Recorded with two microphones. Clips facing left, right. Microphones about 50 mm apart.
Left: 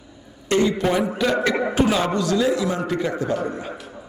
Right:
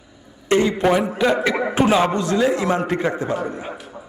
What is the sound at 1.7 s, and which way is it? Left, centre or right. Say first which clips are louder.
A man's voice: right 6 dB; right.